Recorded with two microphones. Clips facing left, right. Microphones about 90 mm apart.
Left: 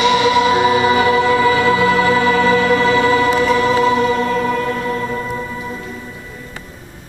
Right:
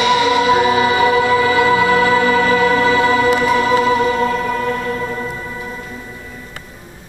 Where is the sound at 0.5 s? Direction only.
10° right (ahead or behind).